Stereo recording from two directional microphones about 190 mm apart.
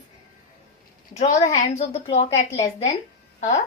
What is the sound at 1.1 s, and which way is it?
A woman's voice, 35° left (ahead or behind).